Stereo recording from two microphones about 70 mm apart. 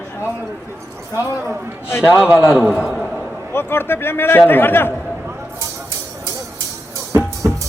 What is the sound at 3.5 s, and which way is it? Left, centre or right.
A man's voice, left.